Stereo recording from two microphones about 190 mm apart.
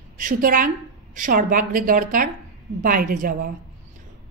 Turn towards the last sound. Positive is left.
turn(degrees=-45)  # may be behind; listen again after turning